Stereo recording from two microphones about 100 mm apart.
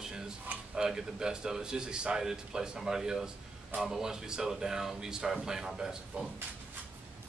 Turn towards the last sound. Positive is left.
turn(degrees=-5)  # may be behind; listen again after turning